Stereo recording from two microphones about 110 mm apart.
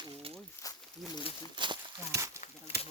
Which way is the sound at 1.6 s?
45° right (ahead or behind).